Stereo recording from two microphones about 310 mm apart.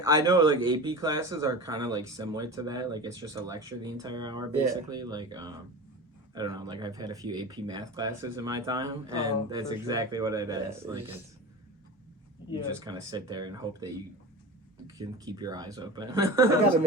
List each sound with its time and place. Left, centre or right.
0.2 s speech: centre
12.8 s speech: centre